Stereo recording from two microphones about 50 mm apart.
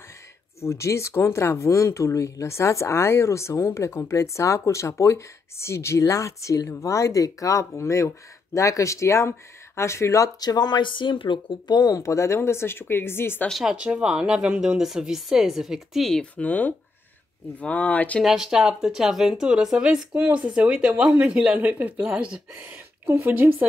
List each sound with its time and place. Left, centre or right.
0.7 s speech: left
9.8 s speech: left
11.9 s speech: left
12.4 s speech: left
13.7 s speech: centre
16.3 s speech: left
18.2 s speech: centre
20.2 s speech: right
21.5 s speech: right
22.0 s speech: centre
23.0 s speech: right
23.3 s speech: right